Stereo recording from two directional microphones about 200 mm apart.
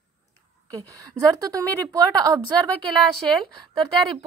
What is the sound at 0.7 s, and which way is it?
A woman's voice, 15° right (ahead or behind).